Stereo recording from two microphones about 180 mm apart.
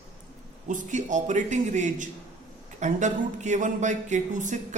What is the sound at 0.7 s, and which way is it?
Speech, 45° right (ahead or behind).